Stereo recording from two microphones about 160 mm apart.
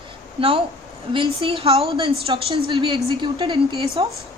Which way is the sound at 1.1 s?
35° right (ahead or behind).